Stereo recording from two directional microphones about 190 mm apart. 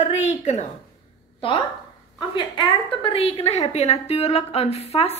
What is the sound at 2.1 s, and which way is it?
A woman's voice, 25° left (ahead or behind).